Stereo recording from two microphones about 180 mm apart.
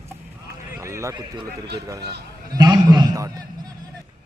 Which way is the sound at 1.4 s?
65° right (ahead or behind).